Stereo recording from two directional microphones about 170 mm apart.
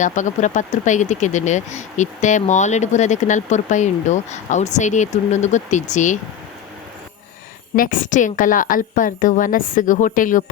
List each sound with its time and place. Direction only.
0.0 s speech: 45° left (ahead or behind)
7.8 s speech: 55° left (ahead or behind)